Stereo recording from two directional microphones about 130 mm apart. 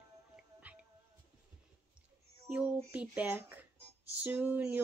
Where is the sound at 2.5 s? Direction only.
10° right (ahead or behind).